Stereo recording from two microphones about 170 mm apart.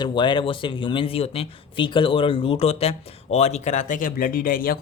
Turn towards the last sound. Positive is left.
turn(degrees=55)  # may be behind; listen again after turning